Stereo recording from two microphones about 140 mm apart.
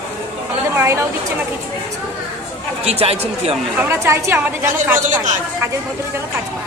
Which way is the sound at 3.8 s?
20° right (ahead or behind).